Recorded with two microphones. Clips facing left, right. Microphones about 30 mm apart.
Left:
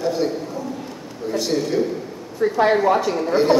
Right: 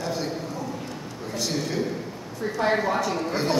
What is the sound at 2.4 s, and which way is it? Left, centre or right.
Speech, left.